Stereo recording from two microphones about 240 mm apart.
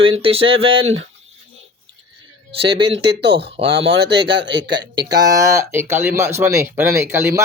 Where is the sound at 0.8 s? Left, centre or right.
Right.